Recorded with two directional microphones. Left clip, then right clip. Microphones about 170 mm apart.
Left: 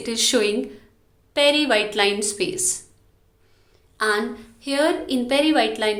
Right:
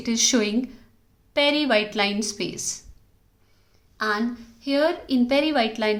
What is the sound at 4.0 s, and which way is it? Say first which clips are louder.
Speech: left 3 dB; 30° right (ahead or behind).